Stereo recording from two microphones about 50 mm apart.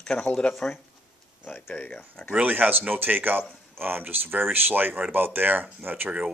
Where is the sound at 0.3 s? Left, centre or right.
Centre.